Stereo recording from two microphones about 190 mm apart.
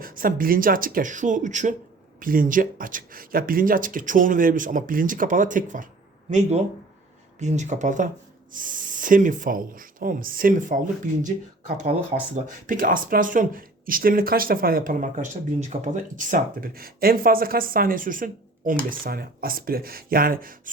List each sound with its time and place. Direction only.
0.0 s speech: 50° right (ahead or behind)